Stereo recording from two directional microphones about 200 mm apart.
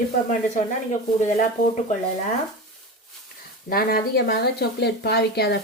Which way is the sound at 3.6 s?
50° left (ahead or behind).